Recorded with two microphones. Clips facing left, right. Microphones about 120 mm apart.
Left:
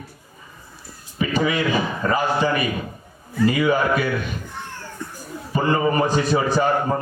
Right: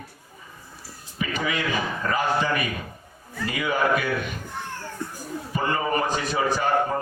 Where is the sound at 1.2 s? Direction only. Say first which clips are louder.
Left 6 dB; 30° left (ahead or behind).